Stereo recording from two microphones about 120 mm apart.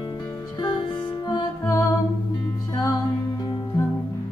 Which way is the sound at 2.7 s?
40° left (ahead or behind).